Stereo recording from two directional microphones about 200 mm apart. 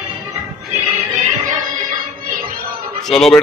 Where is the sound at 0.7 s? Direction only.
35° right (ahead or behind).